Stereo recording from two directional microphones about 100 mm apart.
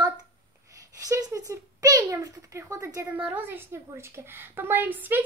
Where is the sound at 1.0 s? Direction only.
35° right (ahead or behind).